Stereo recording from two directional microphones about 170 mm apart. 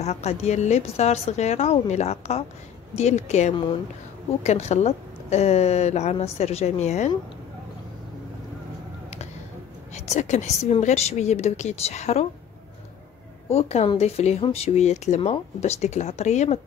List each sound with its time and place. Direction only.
0.0 s speech: 40° left (ahead or behind)
9.9 s speech: 40° left (ahead or behind)
13.5 s speech: 40° left (ahead or behind)